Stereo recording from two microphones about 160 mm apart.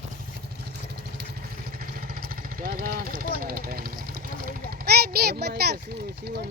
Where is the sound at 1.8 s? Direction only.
65° right (ahead or behind); by 5.8 s 80° right.